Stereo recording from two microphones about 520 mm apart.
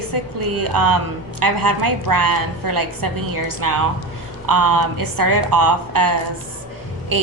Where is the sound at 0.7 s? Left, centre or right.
Right.